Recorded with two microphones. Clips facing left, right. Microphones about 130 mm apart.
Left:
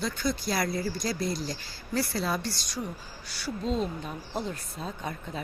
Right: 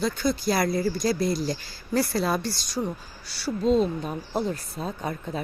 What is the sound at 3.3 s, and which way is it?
Speech, 35° right (ahead or behind).